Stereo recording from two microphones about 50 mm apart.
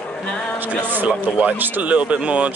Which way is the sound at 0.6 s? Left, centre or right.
Right.